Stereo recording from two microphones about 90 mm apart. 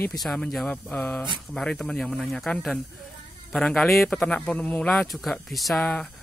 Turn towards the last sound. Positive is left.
turn(degrees=10)  # may be behind; listen again after turning